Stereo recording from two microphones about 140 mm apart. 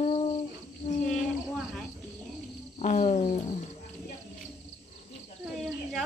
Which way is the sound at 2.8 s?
60° left (ahead or behind).